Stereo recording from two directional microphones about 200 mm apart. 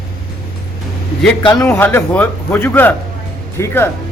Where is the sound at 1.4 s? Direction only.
20° left (ahead or behind).